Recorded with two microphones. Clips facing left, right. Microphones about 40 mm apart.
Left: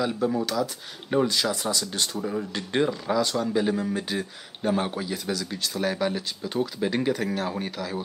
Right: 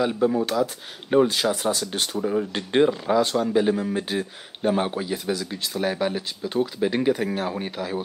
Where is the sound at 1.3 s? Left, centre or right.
Right.